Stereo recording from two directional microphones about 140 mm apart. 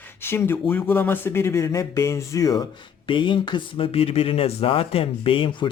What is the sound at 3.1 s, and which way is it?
Speech, 35° left (ahead or behind).